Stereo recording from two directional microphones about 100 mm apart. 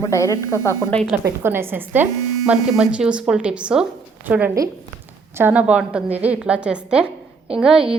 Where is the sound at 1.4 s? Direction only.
25° right (ahead or behind).